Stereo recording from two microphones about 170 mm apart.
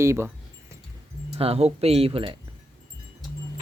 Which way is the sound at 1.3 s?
35° right (ahead or behind).